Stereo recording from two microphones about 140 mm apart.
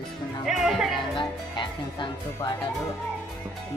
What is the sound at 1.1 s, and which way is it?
Speech, 35° left (ahead or behind).